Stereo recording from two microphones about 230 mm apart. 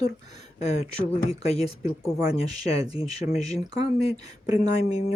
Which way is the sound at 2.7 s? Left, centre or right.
Left.